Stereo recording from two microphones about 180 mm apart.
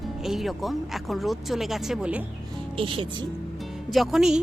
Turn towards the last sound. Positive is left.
turn(degrees=0)  # may be behind; listen again after turning